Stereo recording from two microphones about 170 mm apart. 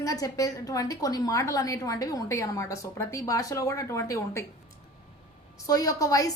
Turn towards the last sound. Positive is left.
turn(degrees=20)  # may be behind; listen again after turning